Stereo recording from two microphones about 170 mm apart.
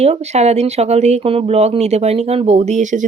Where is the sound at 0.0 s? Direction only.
40° right (ahead or behind).